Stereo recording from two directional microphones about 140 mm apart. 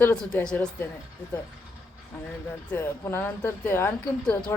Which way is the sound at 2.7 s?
15° left (ahead or behind).